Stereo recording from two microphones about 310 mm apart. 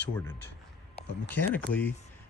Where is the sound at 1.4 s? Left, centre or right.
Left.